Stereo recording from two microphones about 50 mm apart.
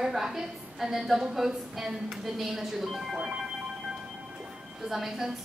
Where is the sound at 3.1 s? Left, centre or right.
Centre.